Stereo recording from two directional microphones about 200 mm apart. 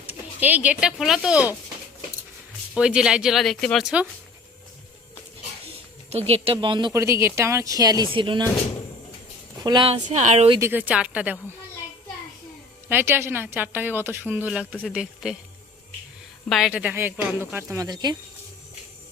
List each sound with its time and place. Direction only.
0.0 s speech: 10° right (ahead or behind)
2.7 s speech: 5° right (ahead or behind)
6.1 s speech: 30° right (ahead or behind)
9.6 s speech: 25° right (ahead or behind)
10.6 s a woman's voice: 10° right (ahead or behind)
12.9 s a woman's voice: 10° right (ahead or behind)
16.5 s a woman's voice: centre (ahead or behind); by 18.2 s 20° right (ahead or behind)